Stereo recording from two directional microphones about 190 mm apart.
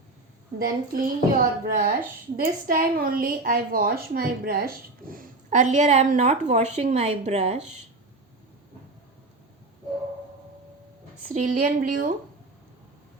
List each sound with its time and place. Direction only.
0.6 s a woman's voice: 45° right (ahead or behind)
11.3 s a woman's voice: 40° right (ahead or behind)